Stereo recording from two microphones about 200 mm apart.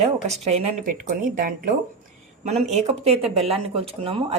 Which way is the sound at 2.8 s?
30° right (ahead or behind).